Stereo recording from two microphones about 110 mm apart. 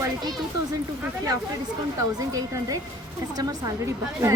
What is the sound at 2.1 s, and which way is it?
A woman's voice, 35° right (ahead or behind).